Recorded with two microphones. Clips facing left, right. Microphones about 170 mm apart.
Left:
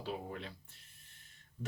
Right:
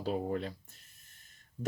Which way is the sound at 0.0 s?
40° right (ahead or behind).